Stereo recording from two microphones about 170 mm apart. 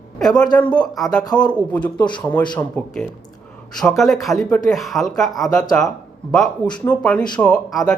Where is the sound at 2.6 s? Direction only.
5° left (ahead or behind).